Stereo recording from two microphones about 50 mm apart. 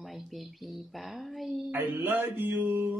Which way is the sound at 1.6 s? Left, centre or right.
Right.